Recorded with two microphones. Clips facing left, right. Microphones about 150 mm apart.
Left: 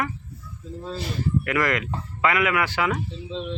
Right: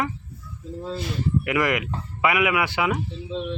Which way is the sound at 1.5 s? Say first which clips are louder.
Right 2 dB; 15° right (ahead or behind).